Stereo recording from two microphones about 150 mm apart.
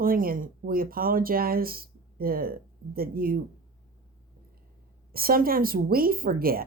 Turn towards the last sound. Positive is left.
turn(degrees=-80)